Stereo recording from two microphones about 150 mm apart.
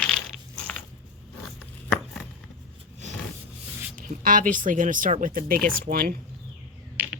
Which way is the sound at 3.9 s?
65° right (ahead or behind).